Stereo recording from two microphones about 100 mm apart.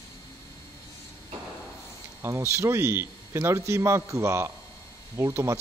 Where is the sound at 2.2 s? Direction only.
25° right (ahead or behind).